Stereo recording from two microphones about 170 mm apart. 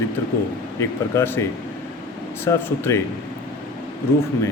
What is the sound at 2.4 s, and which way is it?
Speech, 15° left (ahead or behind).